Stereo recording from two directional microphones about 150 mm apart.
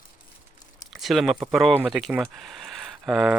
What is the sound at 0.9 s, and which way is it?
Speech, centre (ahead or behind).